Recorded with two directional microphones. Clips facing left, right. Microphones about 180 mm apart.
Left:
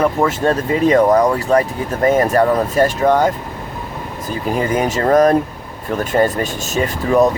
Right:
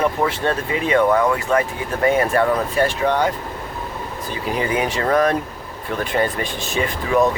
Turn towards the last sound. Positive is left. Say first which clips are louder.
# left 4 dB
turn(degrees=40)  # may be behind; listen again after turning